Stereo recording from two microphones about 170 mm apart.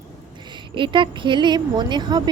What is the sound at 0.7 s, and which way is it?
A woman's voice, 30° right (ahead or behind).